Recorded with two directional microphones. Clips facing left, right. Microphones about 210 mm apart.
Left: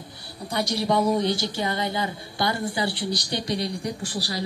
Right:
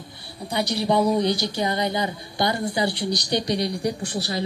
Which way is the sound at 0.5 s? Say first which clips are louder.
Right 2 dB; 10° right (ahead or behind).